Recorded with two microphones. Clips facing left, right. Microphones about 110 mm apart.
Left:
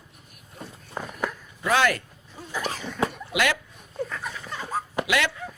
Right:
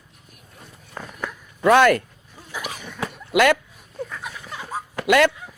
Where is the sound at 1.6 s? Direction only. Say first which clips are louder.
Right 8 dB; 55° right (ahead or behind).